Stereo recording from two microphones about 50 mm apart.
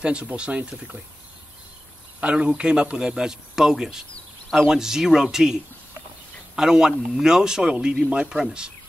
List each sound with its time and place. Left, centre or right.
0.0 s speech: right
2.1 s speech: right